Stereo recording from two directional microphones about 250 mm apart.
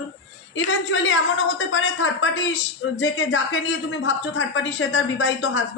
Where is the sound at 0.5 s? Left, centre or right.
Left.